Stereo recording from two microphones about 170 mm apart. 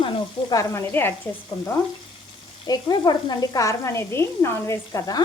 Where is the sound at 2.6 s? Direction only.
25° left (ahead or behind).